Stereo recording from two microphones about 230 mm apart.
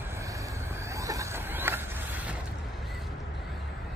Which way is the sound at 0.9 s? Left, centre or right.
Centre.